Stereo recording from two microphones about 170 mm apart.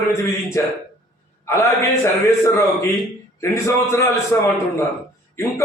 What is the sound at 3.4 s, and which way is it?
A man's voice, 15° left (ahead or behind).